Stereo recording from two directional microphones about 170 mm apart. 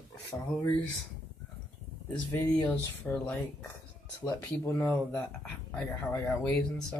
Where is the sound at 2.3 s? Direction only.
10° left (ahead or behind).